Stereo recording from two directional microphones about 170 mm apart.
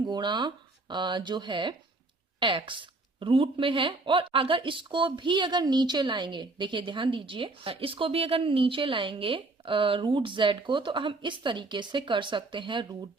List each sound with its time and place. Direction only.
0.0 s a woman's voice: 25° right (ahead or behind)